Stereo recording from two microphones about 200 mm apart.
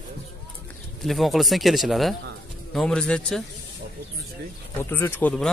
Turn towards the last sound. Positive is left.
turn(degrees=10)  # may be behind; listen again after turning